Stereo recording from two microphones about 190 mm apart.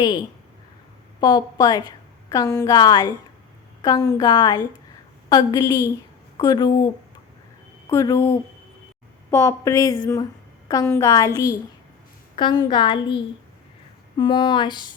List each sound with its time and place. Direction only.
0.0 s a woman's voice: 25° left (ahead or behind)
14.2 s a woman's voice: 25° left (ahead or behind)